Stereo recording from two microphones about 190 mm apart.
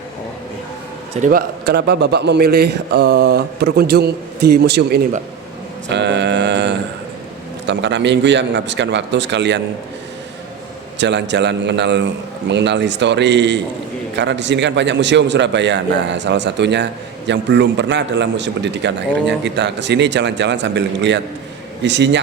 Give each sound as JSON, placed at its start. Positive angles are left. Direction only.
{"t": 1.2, "sound": "a man's voice", "side_deg": -50}
{"t": 5.9, "sound": "a sound", "side_deg": -65}
{"t": 7.7, "sound": "a man's voice", "side_deg": -65}
{"t": 10.9, "sound": "a man's voice", "side_deg": -70}